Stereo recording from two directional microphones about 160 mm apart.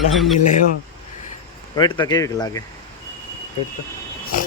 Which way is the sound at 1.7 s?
30° left (ahead or behind).